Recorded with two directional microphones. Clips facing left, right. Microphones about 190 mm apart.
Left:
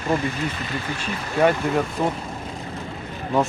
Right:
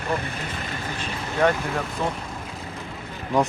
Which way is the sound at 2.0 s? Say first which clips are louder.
Left 1 dB; 10° left (ahead or behind).